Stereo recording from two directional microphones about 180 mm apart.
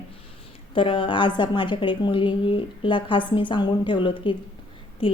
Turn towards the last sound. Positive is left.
turn(degrees=30)  # may be behind; listen again after turning